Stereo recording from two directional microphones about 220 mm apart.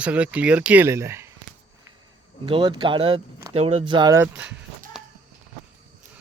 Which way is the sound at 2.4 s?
20° right (ahead or behind).